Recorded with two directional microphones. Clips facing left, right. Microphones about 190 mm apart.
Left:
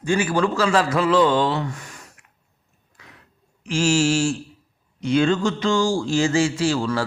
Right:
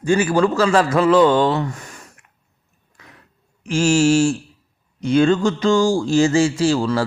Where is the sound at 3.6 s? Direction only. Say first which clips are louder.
Right 4 dB; 50° right (ahead or behind).